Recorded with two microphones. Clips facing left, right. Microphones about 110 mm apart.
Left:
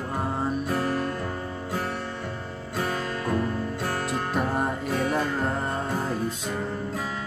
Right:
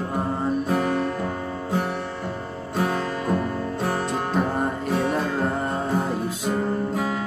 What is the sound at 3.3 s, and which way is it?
Music, 20° right (ahead or behind).